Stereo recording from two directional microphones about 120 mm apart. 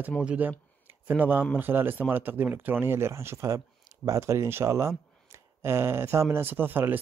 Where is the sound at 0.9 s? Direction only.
15° right (ahead or behind).